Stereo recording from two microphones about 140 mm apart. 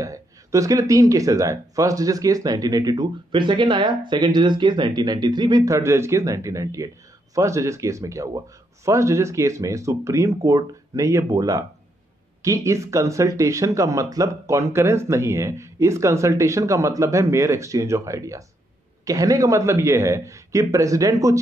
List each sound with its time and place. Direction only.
0.0 s speech: 25° right (ahead or behind)
5.8 s speech: 20° right (ahead or behind)